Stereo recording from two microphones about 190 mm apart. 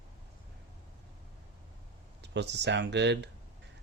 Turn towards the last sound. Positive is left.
turn(degrees=-65)  # may be behind; listen again after turning